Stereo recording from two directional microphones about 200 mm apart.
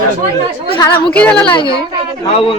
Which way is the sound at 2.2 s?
30° left (ahead or behind).